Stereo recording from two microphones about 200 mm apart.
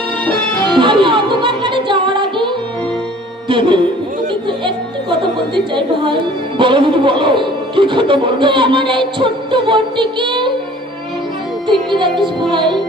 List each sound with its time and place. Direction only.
0.3 s music: 5° left (ahead or behind)
0.8 s music: 25° right (ahead or behind)
3.5 s music: 25° right (ahead or behind)
5.5 s speech: 25° right (ahead or behind)
11.7 s speech: 25° right (ahead or behind)